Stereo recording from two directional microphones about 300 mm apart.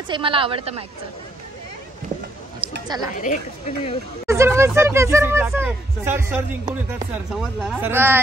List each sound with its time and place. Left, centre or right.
0.1 s speech: centre
2.6 s a sound: centre
3.2 s speech: left
4.3 s speech: centre